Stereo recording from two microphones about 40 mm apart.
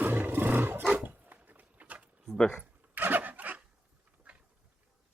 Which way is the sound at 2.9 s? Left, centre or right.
Right.